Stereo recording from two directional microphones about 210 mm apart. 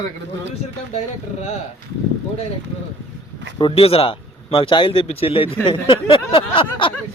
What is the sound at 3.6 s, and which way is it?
Speech, 25° left (ahead or behind).